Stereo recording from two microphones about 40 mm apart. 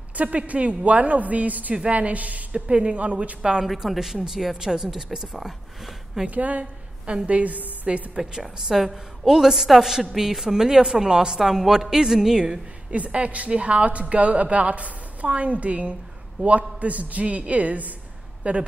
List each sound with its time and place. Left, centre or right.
0.1 s a woman's voice: right
3.6 s a woman's voice: centre
6.2 s a woman's voice: right
6.6 s a sound: right
7.2 s a woman's voice: right
8.2 s a woman's voice: centre
12.4 s a woman's voice: right
13.0 s a woman's voice: right